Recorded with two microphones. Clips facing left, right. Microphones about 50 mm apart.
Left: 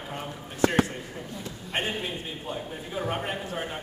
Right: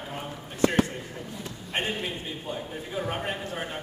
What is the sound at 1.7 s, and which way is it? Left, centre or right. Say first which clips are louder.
A man's voice: even; centre.